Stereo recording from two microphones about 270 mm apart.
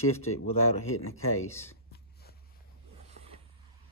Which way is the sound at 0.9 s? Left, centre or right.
Left.